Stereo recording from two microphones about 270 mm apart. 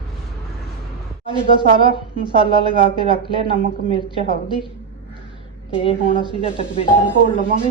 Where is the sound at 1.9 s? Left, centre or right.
Centre.